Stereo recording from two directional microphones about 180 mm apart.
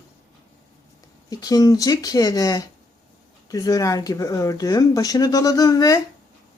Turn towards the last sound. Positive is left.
turn(degrees=20)  # may be behind; listen again after turning